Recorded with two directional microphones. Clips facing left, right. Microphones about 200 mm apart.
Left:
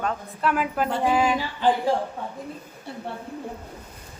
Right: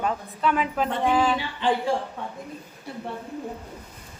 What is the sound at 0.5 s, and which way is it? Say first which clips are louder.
Music: left 2 dB; 5° left (ahead or behind).